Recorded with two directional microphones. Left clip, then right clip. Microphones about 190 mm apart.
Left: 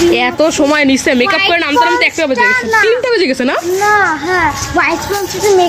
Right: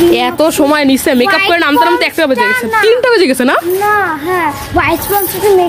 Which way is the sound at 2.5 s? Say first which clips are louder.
Left 1 dB; 45° right (ahead or behind).